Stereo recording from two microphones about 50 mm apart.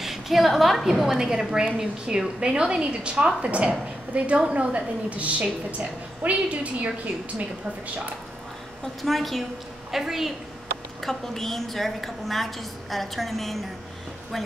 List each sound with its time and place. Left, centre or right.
0.0 s a woman's voice: centre; by 6.9 s right
9.0 s a woman's voice: centre
11.1 s a woman's voice: centre